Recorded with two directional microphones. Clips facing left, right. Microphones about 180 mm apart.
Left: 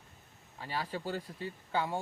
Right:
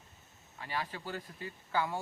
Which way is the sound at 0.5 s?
35° left (ahead or behind).